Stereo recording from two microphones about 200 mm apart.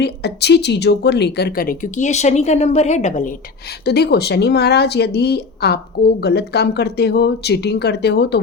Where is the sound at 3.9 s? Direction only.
55° left (ahead or behind).